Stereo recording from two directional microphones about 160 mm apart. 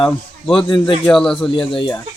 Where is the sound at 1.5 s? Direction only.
30° left (ahead or behind).